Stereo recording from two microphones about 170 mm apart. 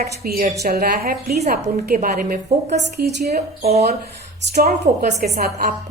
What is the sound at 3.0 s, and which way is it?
Speech, 65° right (ahead or behind).